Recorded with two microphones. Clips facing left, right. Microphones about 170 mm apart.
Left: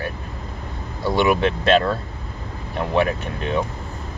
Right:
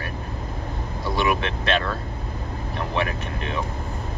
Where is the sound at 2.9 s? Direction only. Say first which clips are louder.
Left 7 dB; 30° left (ahead or behind).